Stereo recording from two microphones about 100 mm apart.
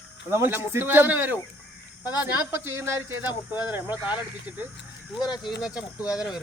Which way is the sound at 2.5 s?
25° right (ahead or behind).